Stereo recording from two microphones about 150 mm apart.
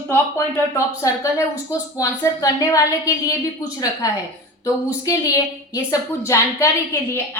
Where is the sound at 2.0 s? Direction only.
20° left (ahead or behind).